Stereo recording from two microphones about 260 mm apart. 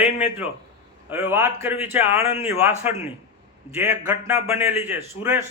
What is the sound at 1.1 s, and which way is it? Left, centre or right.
A man's voice, centre.